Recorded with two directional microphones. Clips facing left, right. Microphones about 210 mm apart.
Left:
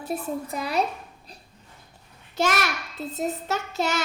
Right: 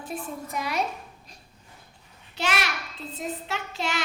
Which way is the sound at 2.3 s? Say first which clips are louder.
Left 4 dB; 45° left (ahead or behind).